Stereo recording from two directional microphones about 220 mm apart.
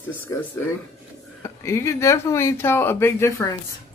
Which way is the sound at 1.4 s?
15° left (ahead or behind).